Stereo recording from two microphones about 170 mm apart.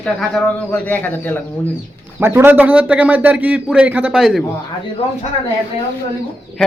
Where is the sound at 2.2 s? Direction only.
15° right (ahead or behind).